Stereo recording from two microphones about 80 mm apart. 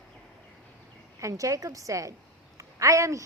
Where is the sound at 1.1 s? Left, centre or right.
Right.